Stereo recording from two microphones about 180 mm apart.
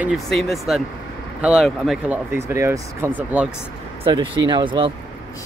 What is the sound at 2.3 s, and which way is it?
Speech, 15° right (ahead or behind).